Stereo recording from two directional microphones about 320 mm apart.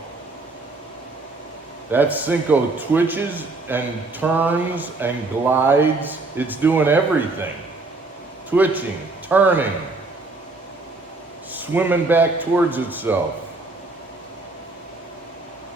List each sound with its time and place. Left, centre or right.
1.9 s a man's voice: centre
8.4 s a man's voice: centre
11.5 s a man's voice: centre